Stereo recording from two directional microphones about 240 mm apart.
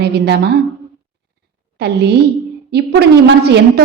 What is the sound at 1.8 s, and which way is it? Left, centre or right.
A woman's voice, right.